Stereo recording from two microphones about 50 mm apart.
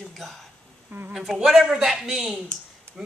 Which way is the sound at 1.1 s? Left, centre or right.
Centre.